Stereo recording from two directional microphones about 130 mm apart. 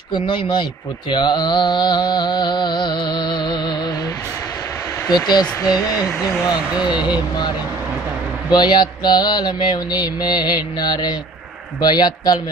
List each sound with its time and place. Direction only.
0.1 s mantra: 35° left (ahead or behind)
5.1 s mantra: 30° left (ahead or behind)
8.5 s mantra: 35° left (ahead or behind)